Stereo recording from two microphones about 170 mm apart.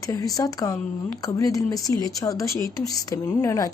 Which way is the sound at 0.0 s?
20° left (ahead or behind).